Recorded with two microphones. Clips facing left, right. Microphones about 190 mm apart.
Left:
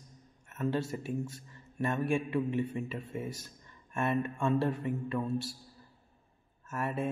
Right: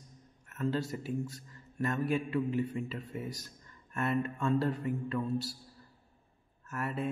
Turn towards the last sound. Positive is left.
turn(degrees=20)  # may be behind; listen again after turning